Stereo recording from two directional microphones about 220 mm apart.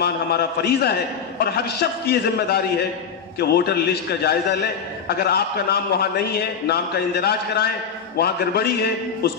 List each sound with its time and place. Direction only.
0.0 s a man's voice: 45° left (ahead or behind)